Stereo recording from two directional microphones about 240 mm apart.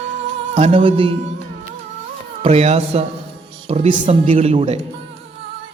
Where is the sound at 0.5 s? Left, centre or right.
Right.